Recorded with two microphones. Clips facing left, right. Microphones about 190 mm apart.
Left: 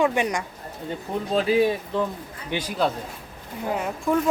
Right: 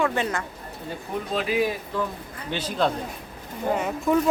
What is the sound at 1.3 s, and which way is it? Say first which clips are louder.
Speech: left 5 dB; 30° left (ahead or behind).